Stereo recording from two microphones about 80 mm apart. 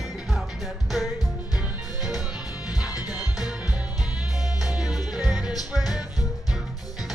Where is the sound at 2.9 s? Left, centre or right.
Left.